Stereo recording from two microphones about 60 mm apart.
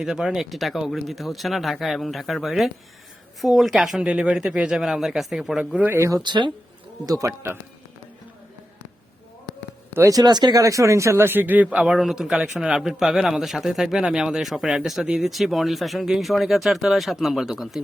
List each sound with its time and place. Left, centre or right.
0.0 s speech: centre
4.0 s speech: centre
5.9 s speech: right
7.0 s speech: right
7.3 s speech: right
10.0 s speech: right
11.2 s a man's voice: right; by 11.9 s centre
11.9 s speech: centre